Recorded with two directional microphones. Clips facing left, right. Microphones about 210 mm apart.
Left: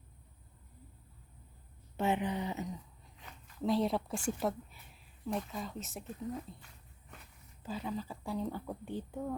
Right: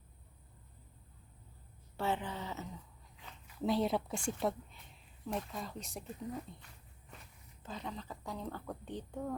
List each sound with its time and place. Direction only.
2.0 s speech: 15° left (ahead or behind)
3.4 s speech: centre (ahead or behind)
7.6 s speech: 5° left (ahead or behind)